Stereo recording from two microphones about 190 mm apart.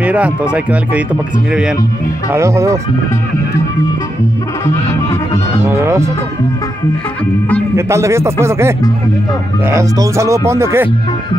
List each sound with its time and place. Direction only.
0.0 s speech: 5° right (ahead or behind)
2.3 s speech: 15° right (ahead or behind)
5.8 s speech: 15° right (ahead or behind)
7.7 s speech: 15° right (ahead or behind)